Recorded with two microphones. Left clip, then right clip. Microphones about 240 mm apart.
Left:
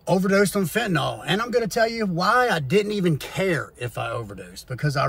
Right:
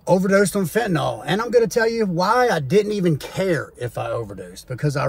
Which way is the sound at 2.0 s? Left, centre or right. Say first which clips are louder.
Right 2 dB; centre.